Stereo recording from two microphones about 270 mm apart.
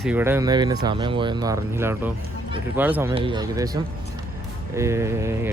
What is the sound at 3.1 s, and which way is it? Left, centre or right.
Speech, centre.